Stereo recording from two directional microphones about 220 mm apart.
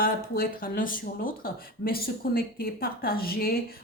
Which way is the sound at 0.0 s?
40° left (ahead or behind).